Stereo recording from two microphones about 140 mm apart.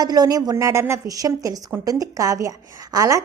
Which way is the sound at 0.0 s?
30° right (ahead or behind).